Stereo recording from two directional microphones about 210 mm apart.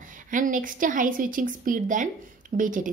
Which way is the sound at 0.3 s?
40° right (ahead or behind).